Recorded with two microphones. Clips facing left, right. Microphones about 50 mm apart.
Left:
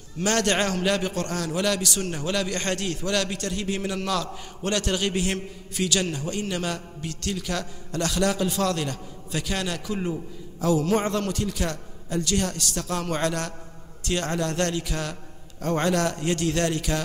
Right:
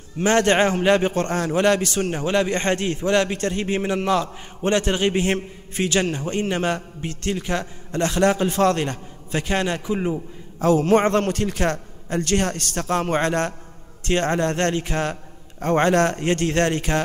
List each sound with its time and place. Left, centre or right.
0.2 s a man's voice: right
10.6 s a man's voice: right